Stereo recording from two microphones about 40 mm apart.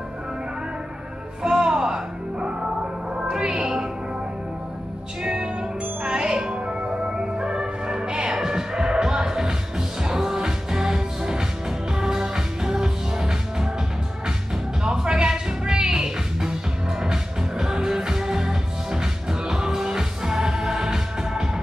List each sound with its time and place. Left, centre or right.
1.4 s music: right
3.2 s music: centre
5.2 s music: centre
8.3 s music: centre
14.8 s music: centre